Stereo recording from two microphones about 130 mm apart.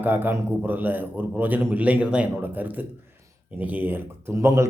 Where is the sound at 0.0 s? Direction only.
15° right (ahead or behind).